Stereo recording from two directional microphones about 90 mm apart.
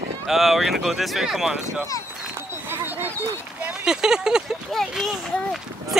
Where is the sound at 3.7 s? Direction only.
5° right (ahead or behind).